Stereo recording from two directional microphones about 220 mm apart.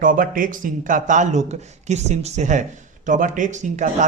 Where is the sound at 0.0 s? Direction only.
40° right (ahead or behind).